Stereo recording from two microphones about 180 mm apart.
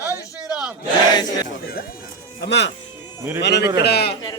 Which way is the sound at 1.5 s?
55° left (ahead or behind).